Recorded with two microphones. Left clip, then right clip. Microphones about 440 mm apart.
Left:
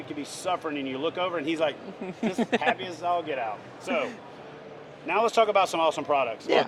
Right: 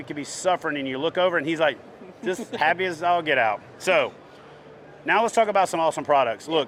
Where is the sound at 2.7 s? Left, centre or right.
Right.